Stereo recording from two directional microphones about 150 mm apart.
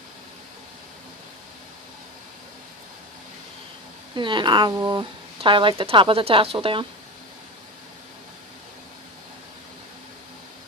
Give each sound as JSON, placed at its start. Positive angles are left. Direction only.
{"t": 4.1, "sound": "speech", "side_deg": -30}